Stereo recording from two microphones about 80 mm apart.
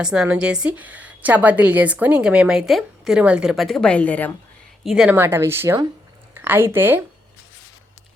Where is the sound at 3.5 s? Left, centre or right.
Centre.